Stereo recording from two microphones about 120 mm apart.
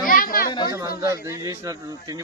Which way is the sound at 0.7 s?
30° right (ahead or behind).